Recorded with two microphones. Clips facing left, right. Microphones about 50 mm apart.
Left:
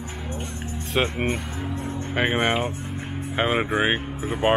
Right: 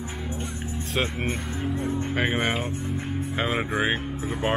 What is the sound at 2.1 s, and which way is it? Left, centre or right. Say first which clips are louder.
Speech: left 5 dB; centre.